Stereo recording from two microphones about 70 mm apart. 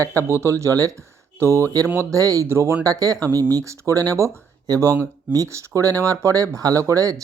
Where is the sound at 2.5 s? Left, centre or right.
Right.